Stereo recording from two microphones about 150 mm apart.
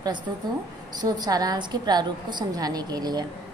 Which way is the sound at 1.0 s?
25° right (ahead or behind).